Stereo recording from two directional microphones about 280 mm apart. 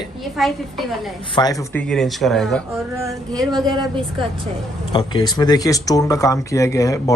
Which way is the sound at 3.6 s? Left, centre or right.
Centre.